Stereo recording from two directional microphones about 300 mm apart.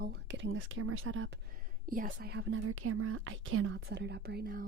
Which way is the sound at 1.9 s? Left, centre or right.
Right.